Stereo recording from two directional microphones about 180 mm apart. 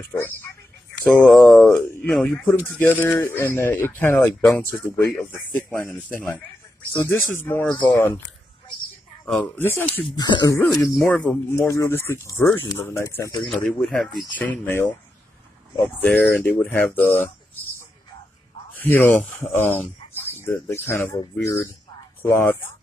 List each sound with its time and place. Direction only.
0.0 s speech: 10° left (ahead or behind)
1.0 s speech: centre (ahead or behind)
9.2 s speech: 5° left (ahead or behind)
10.1 s speech: 20° left (ahead or behind)
13.5 s speech: 5° left (ahead or behind)
16.0 s speech: 10° left (ahead or behind)
18.7 s speech: 10° left (ahead or behind)